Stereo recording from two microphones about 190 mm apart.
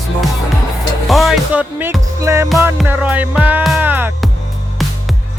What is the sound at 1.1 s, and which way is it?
Music, centre (ahead or behind).